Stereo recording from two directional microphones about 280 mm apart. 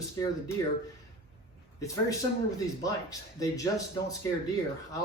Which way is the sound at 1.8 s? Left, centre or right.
Centre.